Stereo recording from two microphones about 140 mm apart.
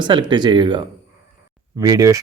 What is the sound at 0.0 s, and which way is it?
Speech, 35° right (ahead or behind).